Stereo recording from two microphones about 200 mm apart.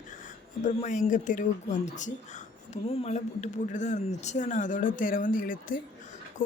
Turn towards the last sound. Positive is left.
turn(degrees=40)  # may be behind; listen again after turning